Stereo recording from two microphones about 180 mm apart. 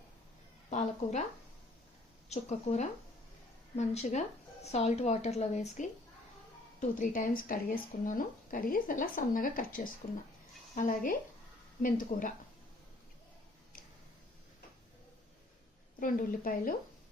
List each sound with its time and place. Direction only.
0.7 s a woman's voice: 40° left (ahead or behind)
2.3 s a woman's voice: 40° left (ahead or behind)
16.0 s speech: 50° left (ahead or behind)